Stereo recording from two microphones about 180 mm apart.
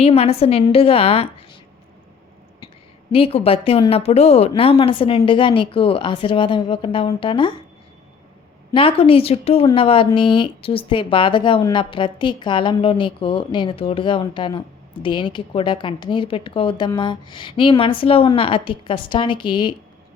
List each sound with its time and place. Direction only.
0.0 s speech: 35° left (ahead or behind)
3.1 s speech: 30° left (ahead or behind)
8.7 s a woman's voice: 30° left (ahead or behind)